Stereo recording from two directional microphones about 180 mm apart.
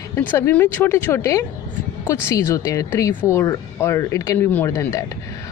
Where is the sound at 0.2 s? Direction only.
10° left (ahead or behind).